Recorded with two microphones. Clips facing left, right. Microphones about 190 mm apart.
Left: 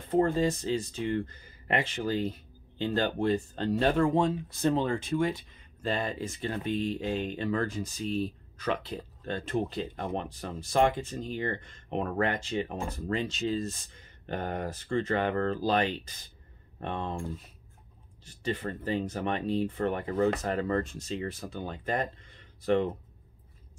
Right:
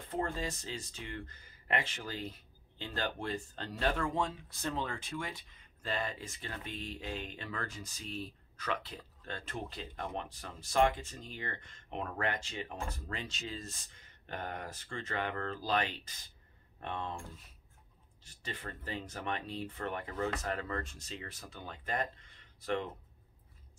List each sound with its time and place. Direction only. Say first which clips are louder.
0.1 s speech: left 11 dB; 25° left (ahead or behind)
18.4 s speech: left 11 dB; 25° left (ahead or behind)